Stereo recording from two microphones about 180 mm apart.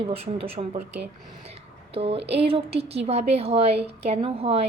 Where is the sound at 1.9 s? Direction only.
35° right (ahead or behind).